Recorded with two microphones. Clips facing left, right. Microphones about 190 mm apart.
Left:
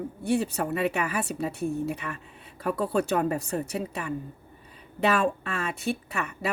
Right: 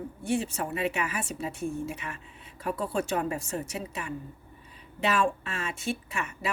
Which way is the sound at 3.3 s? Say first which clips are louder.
Left 4 dB; 60° left (ahead or behind).